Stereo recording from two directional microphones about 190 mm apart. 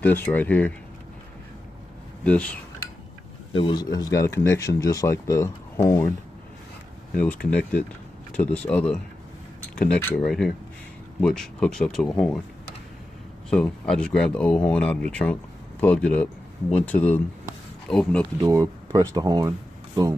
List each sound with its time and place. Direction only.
0.0 s speech: 10° left (ahead or behind)
2.2 s speech: 5° left (ahead or behind)
3.5 s speech: 25° left (ahead or behind)
7.2 s speech: 10° left (ahead or behind)
13.5 s speech: 5° left (ahead or behind)
18.4 s speech: 15° right (ahead or behind)